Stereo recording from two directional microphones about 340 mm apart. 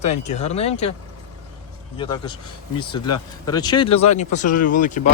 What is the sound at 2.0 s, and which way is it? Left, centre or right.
Speech, centre.